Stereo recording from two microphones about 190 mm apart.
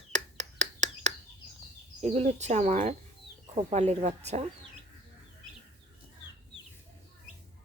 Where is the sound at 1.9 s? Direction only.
35° right (ahead or behind).